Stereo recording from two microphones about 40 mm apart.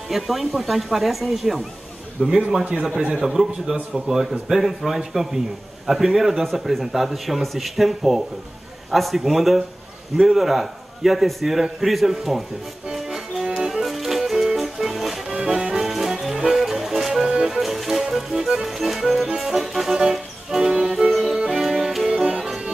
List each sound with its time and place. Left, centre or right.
0.1 s a man's voice: centre
2.2 s a man's voice: centre
3.2 s a man's voice: centre
12.9 s music: centre
15.3 s music: centre
17.6 s music: centre